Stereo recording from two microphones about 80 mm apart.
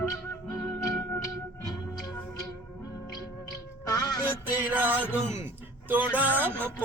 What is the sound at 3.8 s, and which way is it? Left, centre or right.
Music, left.